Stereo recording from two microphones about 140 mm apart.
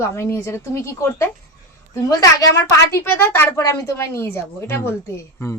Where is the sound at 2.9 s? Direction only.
20° left (ahead or behind).